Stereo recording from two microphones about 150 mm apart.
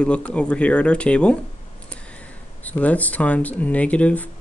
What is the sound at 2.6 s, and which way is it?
Speech, 10° left (ahead or behind).